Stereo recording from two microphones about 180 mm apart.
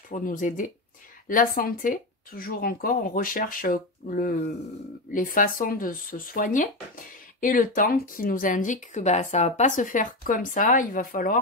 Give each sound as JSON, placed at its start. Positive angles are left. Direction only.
{"t": 0.1, "sound": "speech", "side_deg": 50}